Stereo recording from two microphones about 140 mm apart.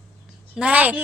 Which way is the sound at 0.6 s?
10° right (ahead or behind).